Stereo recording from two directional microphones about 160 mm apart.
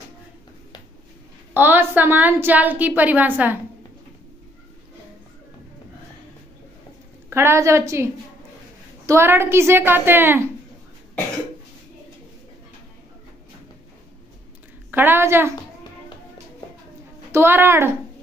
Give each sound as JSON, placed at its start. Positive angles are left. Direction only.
{"t": 1.5, "sound": "a woman's voice", "side_deg": -10}
{"t": 7.2, "sound": "a woman's voice", "side_deg": -15}
{"t": 14.9, "sound": "a woman's voice", "side_deg": -10}
{"t": 17.3, "sound": "a woman's voice", "side_deg": -15}